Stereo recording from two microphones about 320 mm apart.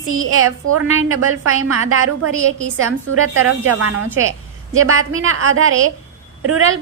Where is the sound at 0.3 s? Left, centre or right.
Right.